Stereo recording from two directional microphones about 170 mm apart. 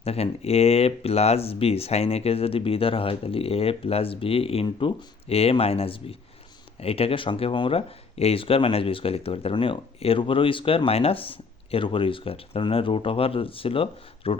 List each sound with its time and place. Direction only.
0.0 s speech: 35° left (ahead or behind)